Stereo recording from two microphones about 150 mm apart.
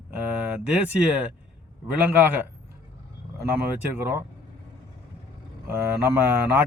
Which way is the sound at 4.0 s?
15° right (ahead or behind).